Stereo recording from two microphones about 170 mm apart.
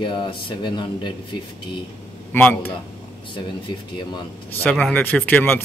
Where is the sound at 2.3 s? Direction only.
10° left (ahead or behind).